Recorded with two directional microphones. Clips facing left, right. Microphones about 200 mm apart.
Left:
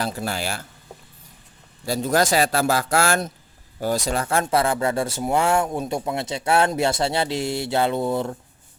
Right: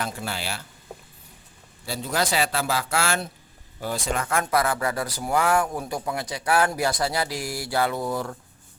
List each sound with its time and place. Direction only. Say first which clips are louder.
0.0 s speech: left 4 dB; 40° left (ahead or behind)
1.9 s speech: left 6 dB; 45° left (ahead or behind); by 8.4 s 25° left (ahead or behind)